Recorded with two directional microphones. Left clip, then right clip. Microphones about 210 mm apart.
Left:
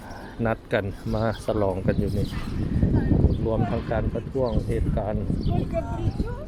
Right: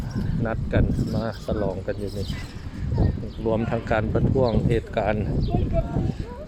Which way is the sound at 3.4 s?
15° right (ahead or behind).